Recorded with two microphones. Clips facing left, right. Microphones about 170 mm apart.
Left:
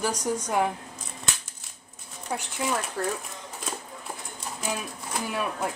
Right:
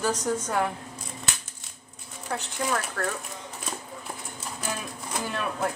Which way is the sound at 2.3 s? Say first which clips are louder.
Even; 10° left (ahead or behind).